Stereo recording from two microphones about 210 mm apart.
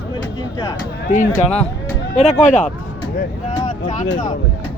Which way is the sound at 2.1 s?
30° left (ahead or behind).